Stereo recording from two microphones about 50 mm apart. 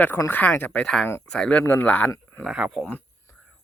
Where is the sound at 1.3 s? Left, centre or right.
Centre.